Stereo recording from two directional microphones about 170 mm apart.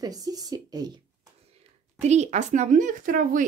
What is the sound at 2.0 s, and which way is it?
Speech, 40° right (ahead or behind).